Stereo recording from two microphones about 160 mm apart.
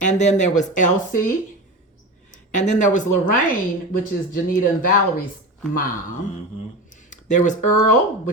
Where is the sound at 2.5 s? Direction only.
50° left (ahead or behind).